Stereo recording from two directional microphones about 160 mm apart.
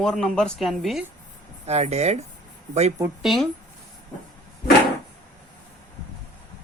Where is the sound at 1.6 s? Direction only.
45° right (ahead or behind).